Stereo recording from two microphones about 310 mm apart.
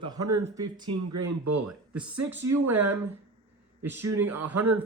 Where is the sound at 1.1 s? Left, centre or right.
Right.